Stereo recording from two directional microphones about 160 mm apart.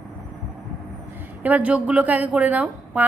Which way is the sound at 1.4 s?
10° right (ahead or behind).